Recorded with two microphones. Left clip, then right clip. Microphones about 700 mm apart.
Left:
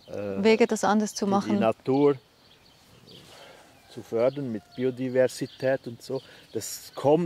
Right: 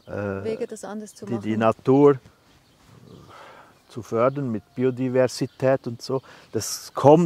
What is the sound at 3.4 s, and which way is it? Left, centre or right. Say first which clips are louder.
Speech: right 3 dB; right.